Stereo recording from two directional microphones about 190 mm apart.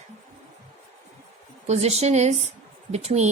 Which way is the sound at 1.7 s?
35° right (ahead or behind).